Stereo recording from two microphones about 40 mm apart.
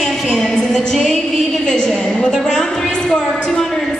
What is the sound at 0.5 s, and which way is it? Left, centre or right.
Speech, centre.